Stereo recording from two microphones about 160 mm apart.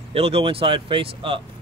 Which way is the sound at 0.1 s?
35° right (ahead or behind).